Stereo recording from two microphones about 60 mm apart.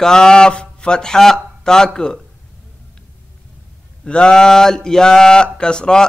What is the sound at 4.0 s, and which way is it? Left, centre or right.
Speech, centre.